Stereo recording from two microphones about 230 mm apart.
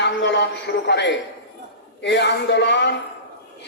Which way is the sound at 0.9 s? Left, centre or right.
Left.